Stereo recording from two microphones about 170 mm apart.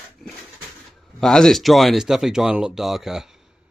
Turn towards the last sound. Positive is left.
turn(degrees=-5)  # may be behind; listen again after turning